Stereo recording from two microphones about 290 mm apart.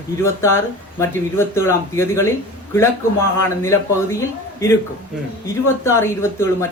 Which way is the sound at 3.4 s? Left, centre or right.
Centre.